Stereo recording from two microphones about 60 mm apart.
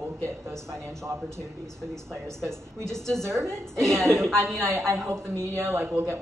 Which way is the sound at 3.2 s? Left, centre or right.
Right.